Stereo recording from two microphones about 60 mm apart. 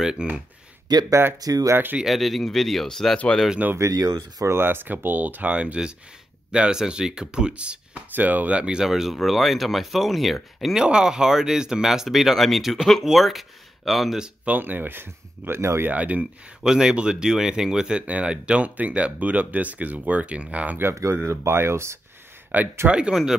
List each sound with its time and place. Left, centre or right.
0.0 s speech: centre
0.9 s speech: right
2.0 s speech: centre
3.9 s speech: right
4.5 s speech: right; by 8.0 s centre
8.1 s speech: right; by 14.1 s centre
14.1 s speech: centre
14.5 s speech: right
15.9 s speech: right
16.6 s speech: centre
20.9 s speech: right
21.2 s speech: right
22.5 s speech: right
22.8 s speech: centre